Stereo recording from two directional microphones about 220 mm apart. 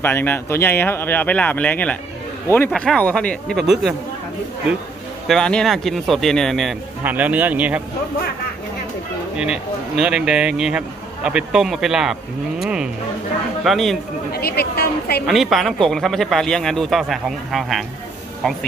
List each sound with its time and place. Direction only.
0.0 s speech: 10° left (ahead or behind)
5.3 s speech: 5° left (ahead or behind)
9.4 s speech: 5° right (ahead or behind)
14.3 s a woman's voice: 45° left (ahead or behind)
15.2 s speech: centre (ahead or behind)